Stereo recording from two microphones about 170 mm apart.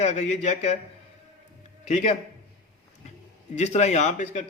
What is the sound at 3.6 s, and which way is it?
Speech, 40° left (ahead or behind).